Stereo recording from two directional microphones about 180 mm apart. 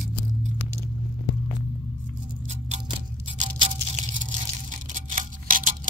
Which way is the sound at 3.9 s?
45° right (ahead or behind).